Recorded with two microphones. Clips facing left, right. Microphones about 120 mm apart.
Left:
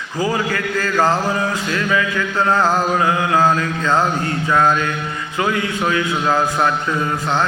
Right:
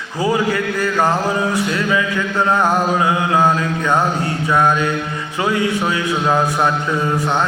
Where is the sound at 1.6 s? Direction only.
20° right (ahead or behind).